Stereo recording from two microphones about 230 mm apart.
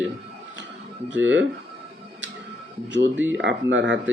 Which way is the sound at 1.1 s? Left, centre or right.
Right.